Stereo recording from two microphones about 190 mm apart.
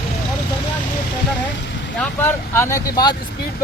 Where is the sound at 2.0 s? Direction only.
10° left (ahead or behind).